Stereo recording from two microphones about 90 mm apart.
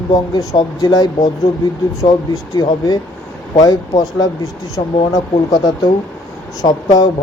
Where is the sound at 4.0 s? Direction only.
50° left (ahead or behind).